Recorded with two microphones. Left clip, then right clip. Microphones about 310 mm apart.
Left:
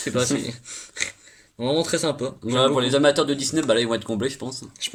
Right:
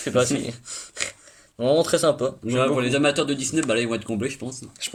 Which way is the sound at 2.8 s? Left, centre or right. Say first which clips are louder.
Left 3 dB; centre.